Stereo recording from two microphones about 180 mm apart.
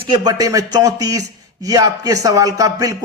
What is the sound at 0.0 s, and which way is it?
A man's voice, 25° right (ahead or behind).